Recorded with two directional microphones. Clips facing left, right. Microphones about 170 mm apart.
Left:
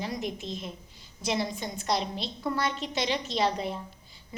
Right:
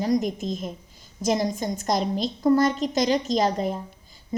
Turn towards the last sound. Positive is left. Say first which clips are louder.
# right 9 dB
turn(degrees=-40)  # may be behind; listen again after turning